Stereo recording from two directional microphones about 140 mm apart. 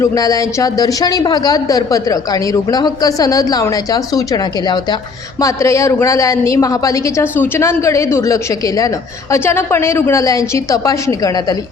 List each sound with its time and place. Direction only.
0.0 s a man's voice: 25° left (ahead or behind)